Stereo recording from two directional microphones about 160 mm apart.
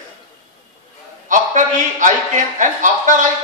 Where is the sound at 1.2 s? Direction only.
50° right (ahead or behind).